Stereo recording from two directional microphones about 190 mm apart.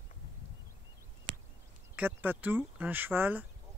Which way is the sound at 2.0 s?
10° right (ahead or behind).